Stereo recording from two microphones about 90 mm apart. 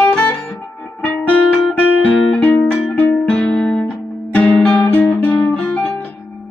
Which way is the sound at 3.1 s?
10° left (ahead or behind).